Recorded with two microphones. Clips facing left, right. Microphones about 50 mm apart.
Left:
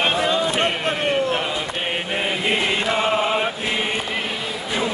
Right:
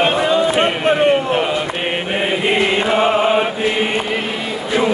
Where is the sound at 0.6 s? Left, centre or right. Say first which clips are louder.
Right 7 dB; right.